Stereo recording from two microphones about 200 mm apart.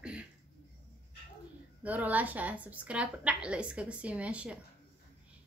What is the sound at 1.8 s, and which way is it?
A woman's voice, 10° right (ahead or behind).